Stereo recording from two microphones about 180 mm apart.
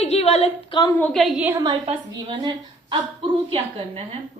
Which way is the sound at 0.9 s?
5° left (ahead or behind).